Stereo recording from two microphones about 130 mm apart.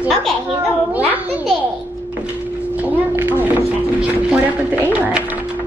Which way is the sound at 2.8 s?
15° right (ahead or behind).